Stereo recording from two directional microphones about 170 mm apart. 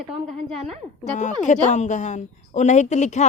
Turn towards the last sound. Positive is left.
turn(degrees=45)  # may be behind; listen again after turning